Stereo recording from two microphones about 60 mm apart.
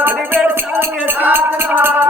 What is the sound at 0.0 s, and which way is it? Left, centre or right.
Music, right.